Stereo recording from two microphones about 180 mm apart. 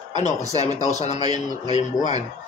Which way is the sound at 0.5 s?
35° left (ahead or behind).